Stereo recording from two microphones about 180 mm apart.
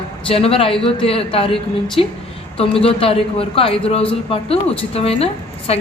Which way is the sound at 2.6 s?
30° left (ahead or behind).